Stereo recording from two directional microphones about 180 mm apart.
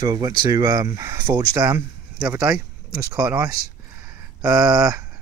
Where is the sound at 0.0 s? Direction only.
20° right (ahead or behind).